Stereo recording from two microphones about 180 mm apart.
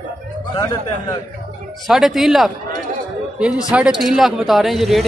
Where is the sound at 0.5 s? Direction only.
20° left (ahead or behind).